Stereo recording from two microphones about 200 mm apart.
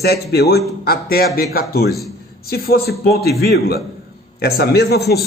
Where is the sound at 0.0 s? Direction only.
50° left (ahead or behind).